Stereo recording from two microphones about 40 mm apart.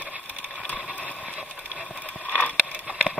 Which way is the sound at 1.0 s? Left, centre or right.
Left.